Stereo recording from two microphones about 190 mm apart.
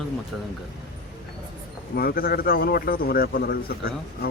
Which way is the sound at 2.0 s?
50° left (ahead or behind).